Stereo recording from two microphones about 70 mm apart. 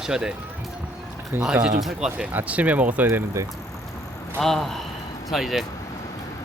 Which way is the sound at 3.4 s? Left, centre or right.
Right.